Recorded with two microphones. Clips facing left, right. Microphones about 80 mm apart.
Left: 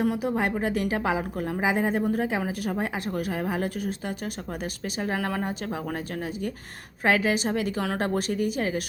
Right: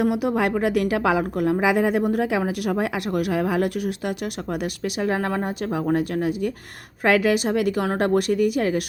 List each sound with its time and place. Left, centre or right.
0.0 s speech: right
4.6 s speech: right
6.0 s speech: right